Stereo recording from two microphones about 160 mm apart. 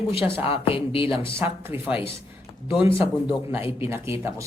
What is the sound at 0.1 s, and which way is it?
Speech, 35° left (ahead or behind).